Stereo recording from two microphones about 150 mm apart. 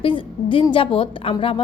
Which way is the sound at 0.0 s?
35° left (ahead or behind).